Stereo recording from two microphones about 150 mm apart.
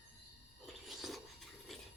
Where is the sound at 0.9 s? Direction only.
Centre (ahead or behind).